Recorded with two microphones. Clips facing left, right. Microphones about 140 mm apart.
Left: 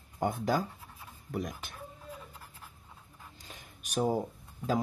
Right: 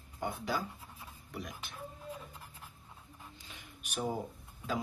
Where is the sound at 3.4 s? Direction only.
40° left (ahead or behind).